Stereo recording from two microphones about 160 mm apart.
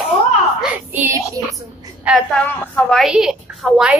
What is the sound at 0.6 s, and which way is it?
Child singing, 10° right (ahead or behind).